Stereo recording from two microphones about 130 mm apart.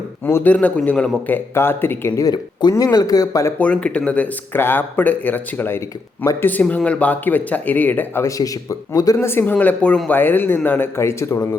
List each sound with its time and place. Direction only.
0.3 s speech: 15° left (ahead or behind)
3.6 s speech: 10° left (ahead or behind)